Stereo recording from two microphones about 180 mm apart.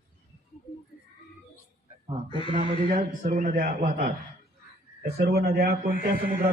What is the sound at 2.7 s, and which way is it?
A man's voice, 40° right (ahead or behind).